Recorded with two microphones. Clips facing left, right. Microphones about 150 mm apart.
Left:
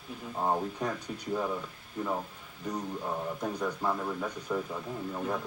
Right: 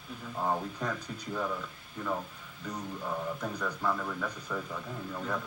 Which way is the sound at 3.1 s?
25° left (ahead or behind).